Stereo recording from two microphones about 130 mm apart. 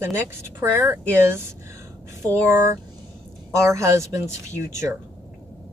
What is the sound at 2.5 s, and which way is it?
Speech, 20° right (ahead or behind).